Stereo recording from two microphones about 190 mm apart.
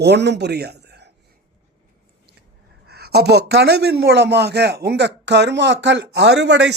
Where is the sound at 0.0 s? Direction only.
60° right (ahead or behind).